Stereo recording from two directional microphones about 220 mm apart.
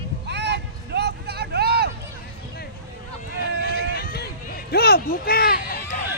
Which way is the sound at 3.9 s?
45° left (ahead or behind).